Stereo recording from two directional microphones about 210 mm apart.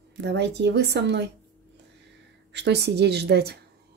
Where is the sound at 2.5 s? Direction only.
55° right (ahead or behind).